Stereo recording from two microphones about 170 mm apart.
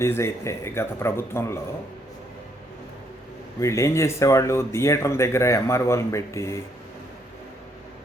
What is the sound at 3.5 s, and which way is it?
Speech, 15° left (ahead or behind).